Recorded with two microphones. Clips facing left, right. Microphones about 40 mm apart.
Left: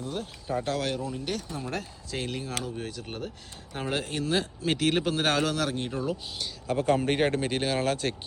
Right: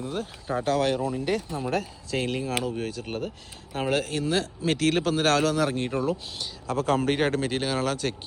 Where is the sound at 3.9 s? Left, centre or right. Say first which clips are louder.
Right 3 dB; centre.